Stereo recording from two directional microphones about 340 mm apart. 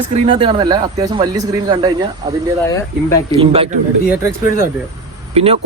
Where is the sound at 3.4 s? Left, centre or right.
Centre.